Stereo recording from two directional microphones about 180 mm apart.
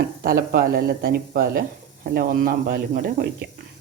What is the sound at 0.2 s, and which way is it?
Speech, 55° right (ahead or behind).